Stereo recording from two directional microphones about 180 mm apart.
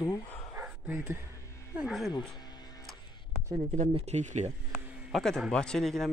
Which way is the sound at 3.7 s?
40° right (ahead or behind).